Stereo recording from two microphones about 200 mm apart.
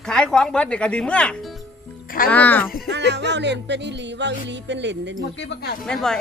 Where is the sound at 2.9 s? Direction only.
60° right (ahead or behind).